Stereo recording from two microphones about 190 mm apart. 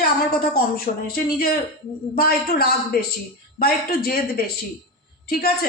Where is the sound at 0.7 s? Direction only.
50° left (ahead or behind).